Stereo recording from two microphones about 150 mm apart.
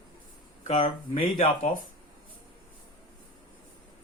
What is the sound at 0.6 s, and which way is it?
Speech, 55° left (ahead or behind).